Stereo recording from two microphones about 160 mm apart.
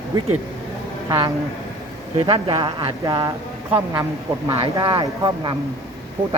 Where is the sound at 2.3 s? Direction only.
30° right (ahead or behind).